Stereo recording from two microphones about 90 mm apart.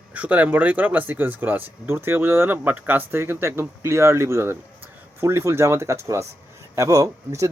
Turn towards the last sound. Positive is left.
turn(degrees=-35)  # may be behind; listen again after turning